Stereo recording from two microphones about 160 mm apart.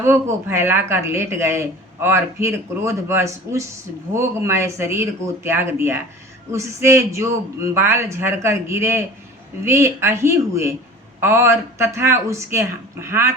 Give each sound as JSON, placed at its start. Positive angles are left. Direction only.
{"t": 0.0, "sound": "speech", "side_deg": -15}